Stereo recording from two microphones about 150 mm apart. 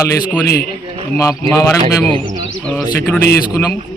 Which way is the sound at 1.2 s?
20° left (ahead or behind).